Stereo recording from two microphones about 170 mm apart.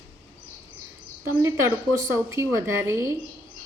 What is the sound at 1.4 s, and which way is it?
A woman's voice, 15° right (ahead or behind).